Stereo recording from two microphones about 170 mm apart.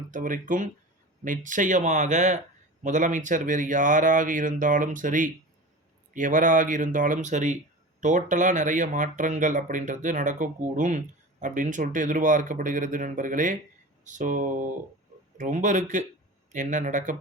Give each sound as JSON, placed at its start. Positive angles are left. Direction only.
{"t": 0.1, "sound": "speech", "side_deg": -50}